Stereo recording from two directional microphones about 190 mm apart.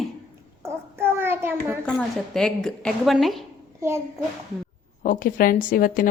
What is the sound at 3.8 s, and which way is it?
Speech, 15° right (ahead or behind).